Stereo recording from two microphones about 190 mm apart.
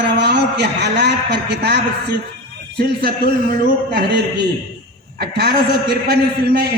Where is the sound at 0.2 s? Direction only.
60° right (ahead or behind).